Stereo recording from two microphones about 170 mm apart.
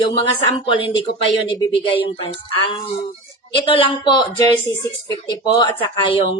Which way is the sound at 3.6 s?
30° left (ahead or behind).